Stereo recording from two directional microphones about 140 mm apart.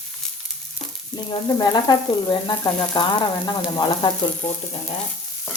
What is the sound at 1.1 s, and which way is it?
Frying, 30° left (ahead or behind).